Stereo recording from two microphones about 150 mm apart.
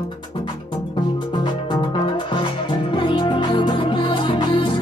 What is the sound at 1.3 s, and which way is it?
Music, 30° left (ahead or behind).